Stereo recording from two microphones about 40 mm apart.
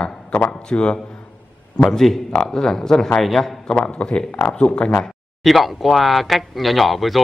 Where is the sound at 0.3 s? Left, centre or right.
Left.